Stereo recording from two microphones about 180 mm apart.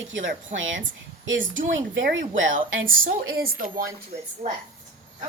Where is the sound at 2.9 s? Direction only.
55° right (ahead or behind).